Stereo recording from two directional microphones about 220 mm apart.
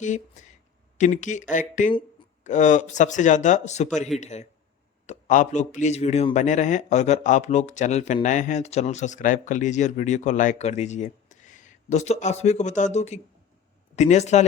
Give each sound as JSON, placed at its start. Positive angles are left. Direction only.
{"t": 0.0, "sound": "a man's voice", "side_deg": 35}